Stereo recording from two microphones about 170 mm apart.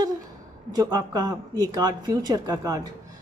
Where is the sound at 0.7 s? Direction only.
20° right (ahead or behind).